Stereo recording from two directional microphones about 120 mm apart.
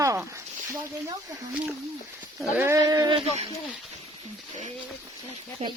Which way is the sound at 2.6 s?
25° right (ahead or behind).